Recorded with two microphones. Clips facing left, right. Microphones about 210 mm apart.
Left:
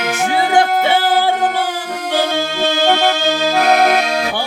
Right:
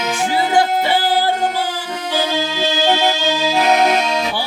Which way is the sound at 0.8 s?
60° left (ahead or behind).